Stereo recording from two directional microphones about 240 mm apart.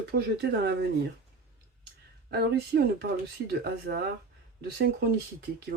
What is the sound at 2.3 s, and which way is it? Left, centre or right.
Speech, right.